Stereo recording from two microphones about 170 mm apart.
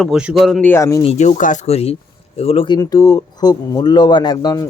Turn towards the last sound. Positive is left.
turn(degrees=25)  # may be behind; listen again after turning